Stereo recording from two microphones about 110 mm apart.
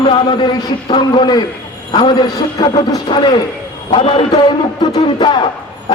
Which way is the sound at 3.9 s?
60° left (ahead or behind).